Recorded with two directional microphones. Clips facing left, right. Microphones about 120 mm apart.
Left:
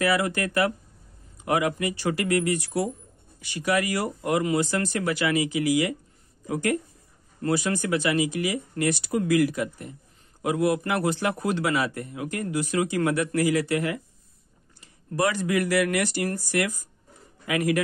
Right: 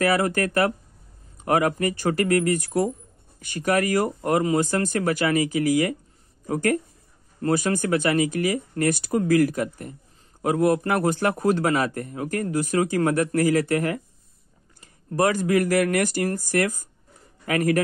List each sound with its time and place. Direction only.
0.0 s speech: 45° right (ahead or behind)